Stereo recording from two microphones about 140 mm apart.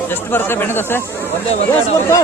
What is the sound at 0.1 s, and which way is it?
Speech, 15° left (ahead or behind).